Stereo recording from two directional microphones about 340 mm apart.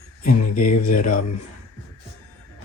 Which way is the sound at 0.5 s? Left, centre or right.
Left.